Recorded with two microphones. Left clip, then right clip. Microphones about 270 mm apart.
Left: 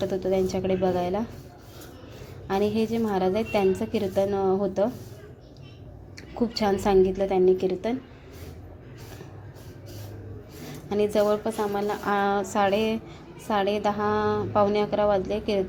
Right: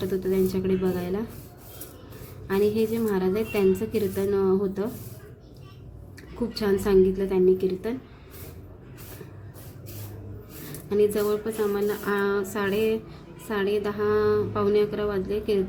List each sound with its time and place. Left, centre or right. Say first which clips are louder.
0.0 s a woman's voice: even; centre
2.5 s a woman's voice: right 2 dB; centre
6.5 s a woman's voice: right 1 dB; centre
10.8 s a woman's voice: even; centre